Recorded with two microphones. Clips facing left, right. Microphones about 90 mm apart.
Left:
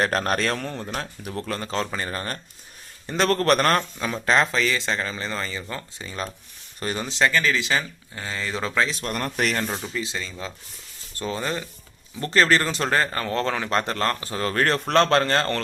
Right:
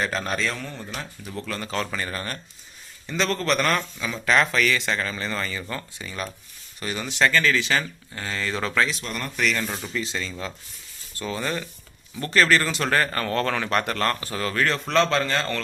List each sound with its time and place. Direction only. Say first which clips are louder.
0.0 s speech: left 3 dB; 55° left (ahead or behind); by 2.4 s 35° left (ahead or behind)
3.1 s speech: left 4 dB; 45° left (ahead or behind)
4.3 s speech: even; 25° left (ahead or behind)
6.7 s speech: left 1 dB; 35° left (ahead or behind); by 8.9 s 20° left (ahead or behind)
9.0 s speech: left 1 dB; 55° left (ahead or behind)
9.9 s speech: right 1 dB; 15° left (ahead or behind)
11.2 s speech: left 1 dB; 30° left (ahead or behind); by 15.6 s 50° left (ahead or behind)